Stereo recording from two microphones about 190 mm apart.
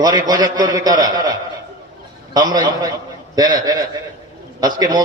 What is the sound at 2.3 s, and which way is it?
A man's voice, 20° right (ahead or behind).